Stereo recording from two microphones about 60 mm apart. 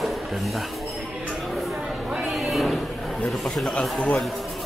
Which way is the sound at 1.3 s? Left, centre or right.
Centre.